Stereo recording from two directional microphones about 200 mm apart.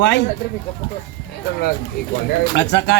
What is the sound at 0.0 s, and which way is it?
Speech, 60° left (ahead or behind).